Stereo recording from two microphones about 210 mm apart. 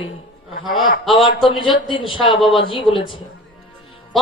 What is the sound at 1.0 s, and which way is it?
Speech, centre (ahead or behind).